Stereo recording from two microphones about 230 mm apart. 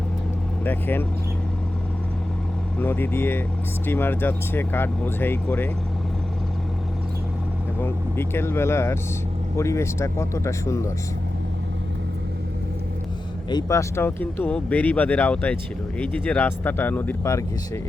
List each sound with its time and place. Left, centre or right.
0.6 s speech: centre
2.7 s speech: centre
7.8 s speech: centre
13.5 s speech: centre